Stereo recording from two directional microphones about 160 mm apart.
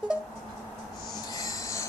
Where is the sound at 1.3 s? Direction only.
20° left (ahead or behind).